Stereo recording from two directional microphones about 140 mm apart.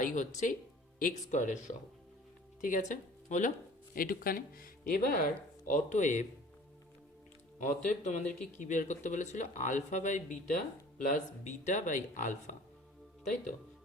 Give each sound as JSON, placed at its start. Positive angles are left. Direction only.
{"t": 0.0, "sound": "speech", "side_deg": 65}
{"t": 3.9, "sound": "speech", "side_deg": 90}
{"t": 5.7, "sound": "speech", "side_deg": 60}
{"t": 7.6, "sound": "speech", "side_deg": 60}